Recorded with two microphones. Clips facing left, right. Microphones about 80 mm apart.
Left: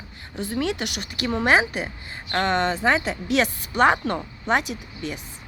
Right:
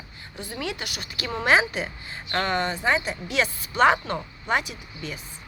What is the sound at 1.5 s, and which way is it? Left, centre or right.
Speech, left.